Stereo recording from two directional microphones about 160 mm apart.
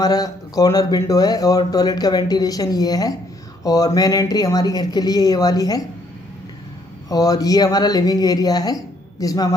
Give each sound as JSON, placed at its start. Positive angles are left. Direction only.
{"t": 0.0, "sound": "speech", "side_deg": 25}
{"t": 7.1, "sound": "speech", "side_deg": 25}